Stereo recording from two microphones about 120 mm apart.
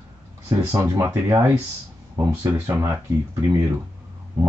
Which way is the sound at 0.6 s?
25° right (ahead or behind).